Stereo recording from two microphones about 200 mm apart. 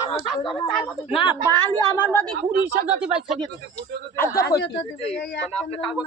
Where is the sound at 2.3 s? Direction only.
60° right (ahead or behind).